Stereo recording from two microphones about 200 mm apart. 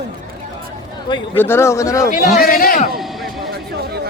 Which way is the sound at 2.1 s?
40° left (ahead or behind).